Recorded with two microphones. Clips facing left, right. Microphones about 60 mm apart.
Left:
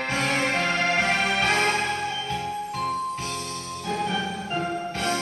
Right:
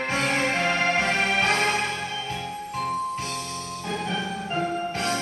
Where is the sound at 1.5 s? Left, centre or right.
Centre.